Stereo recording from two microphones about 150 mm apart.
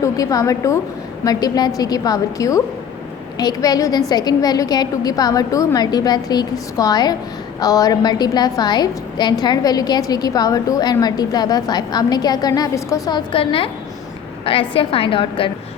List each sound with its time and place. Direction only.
0.0 s a woman's voice: 25° left (ahead or behind)